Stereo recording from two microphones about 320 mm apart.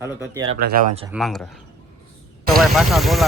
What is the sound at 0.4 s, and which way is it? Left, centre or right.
Speech, right.